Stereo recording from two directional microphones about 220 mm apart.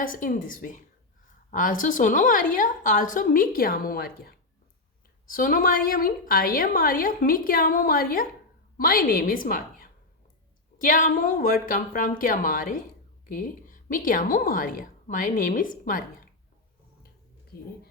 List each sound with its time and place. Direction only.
0.0 s a woman's voice: 40° left (ahead or behind)